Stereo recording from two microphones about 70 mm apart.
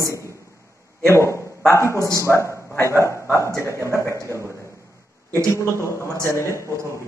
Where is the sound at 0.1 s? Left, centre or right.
Right.